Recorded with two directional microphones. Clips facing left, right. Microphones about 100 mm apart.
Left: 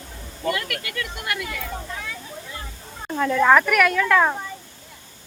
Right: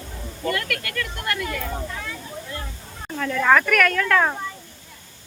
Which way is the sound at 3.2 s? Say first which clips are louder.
Left 2 dB; 15° left (ahead or behind).